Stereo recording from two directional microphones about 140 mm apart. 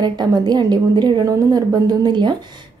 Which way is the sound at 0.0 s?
30° right (ahead or behind).